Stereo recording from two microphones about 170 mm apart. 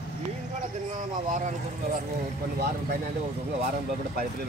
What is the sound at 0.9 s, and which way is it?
Speech, 45° right (ahead or behind).